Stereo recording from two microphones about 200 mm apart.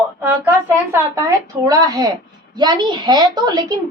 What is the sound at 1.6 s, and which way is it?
A woman's voice, 20° right (ahead or behind).